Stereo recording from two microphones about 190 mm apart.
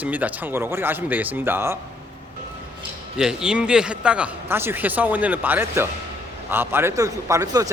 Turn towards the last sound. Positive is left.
turn(degrees=-20)  # may be behind; listen again after turning